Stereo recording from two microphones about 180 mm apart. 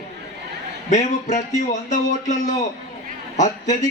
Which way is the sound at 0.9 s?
40° left (ahead or behind).